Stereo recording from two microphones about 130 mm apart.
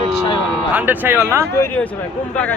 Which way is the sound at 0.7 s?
15° right (ahead or behind).